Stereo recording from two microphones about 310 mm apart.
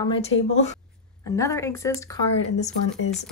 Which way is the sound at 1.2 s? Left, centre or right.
Centre.